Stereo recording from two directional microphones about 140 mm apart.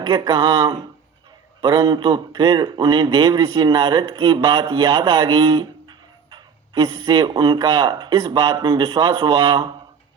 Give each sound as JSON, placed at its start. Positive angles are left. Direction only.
{"t": 0.0, "sound": "a man's voice", "side_deg": -35}